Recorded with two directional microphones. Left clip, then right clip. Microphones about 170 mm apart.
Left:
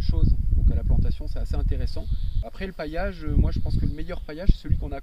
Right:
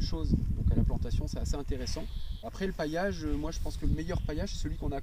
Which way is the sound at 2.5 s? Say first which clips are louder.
Left 1 dB; 25° left (ahead or behind).